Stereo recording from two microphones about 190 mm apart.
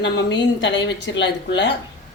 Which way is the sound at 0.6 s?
70° left (ahead or behind).